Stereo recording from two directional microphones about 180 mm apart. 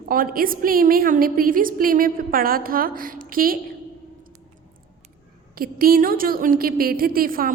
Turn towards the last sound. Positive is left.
turn(degrees=-55)  # may be behind; listen again after turning